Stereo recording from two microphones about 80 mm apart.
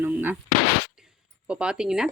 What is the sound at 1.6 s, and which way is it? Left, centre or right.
Speech, centre.